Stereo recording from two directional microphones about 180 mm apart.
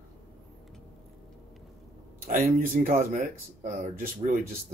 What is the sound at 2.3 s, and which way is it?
Speech, 50° right (ahead or behind).